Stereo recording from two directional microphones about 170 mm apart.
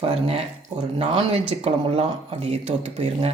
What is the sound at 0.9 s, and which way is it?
Speech, 35° right (ahead or behind).